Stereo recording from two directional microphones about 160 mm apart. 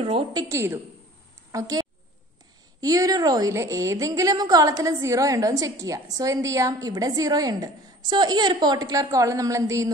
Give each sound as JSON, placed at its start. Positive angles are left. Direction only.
{"t": 0.0, "sound": "a woman's voice", "side_deg": -30}